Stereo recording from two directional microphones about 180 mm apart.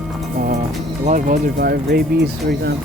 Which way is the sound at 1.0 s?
45° right (ahead or behind).